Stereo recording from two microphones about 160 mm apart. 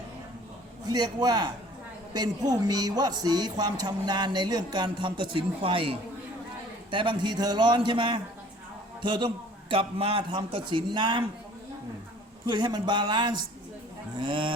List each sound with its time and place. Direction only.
0.9 s a man's voice: 25° right (ahead or behind)
12.5 s a man's voice: 25° right (ahead or behind)